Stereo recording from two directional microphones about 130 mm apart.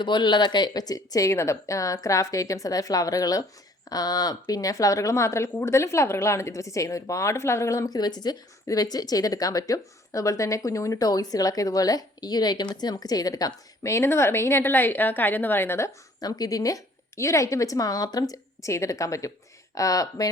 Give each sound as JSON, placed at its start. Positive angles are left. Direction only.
{"t": 0.0, "sound": "speech", "side_deg": 35}